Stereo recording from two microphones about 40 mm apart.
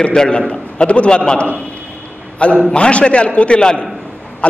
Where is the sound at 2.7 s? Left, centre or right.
Left.